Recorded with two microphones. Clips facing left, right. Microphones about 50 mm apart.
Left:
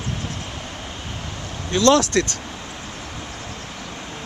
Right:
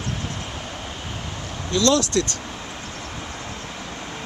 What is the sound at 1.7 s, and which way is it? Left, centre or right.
Speech, left.